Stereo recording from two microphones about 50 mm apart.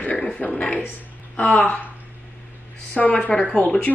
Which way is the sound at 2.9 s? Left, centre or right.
Left.